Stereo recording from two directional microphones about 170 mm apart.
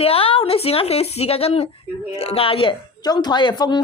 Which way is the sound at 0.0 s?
35° left (ahead or behind).